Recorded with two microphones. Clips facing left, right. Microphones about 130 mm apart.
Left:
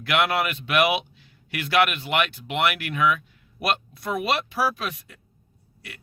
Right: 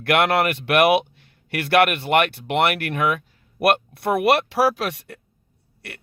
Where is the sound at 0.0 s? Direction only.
60° right (ahead or behind).